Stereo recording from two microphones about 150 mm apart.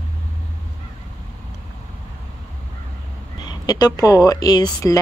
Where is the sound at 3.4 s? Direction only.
30° left (ahead or behind).